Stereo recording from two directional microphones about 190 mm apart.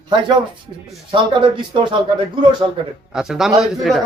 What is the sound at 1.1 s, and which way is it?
Speech, 25° right (ahead or behind).